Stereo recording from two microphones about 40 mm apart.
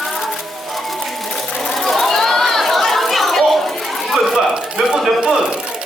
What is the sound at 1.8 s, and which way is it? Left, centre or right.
Chatter, centre.